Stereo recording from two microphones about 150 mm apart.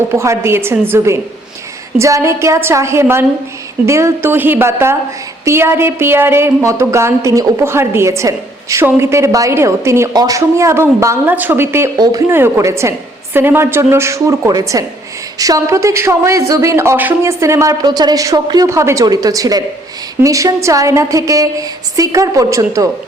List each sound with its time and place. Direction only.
0.1 s a woman's voice: 20° right (ahead or behind)